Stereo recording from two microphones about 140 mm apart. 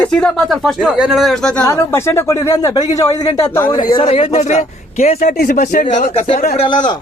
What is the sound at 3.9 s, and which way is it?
A man's voice, 45° left (ahead or behind).